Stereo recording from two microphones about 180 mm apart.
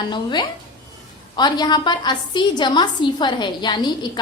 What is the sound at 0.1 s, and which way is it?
A woman's voice, 25° left (ahead or behind).